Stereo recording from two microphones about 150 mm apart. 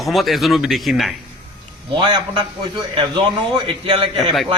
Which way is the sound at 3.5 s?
35° right (ahead or behind).